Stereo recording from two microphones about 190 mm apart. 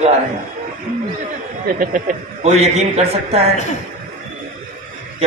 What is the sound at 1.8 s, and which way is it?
A man's voice, 45° right (ahead or behind).